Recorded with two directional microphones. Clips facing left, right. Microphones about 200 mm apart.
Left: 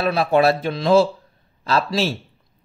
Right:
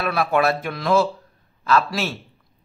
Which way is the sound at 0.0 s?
30° left (ahead or behind).